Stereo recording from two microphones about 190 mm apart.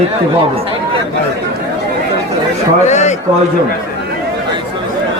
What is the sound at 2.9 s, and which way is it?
Speech, 40° left (ahead or behind).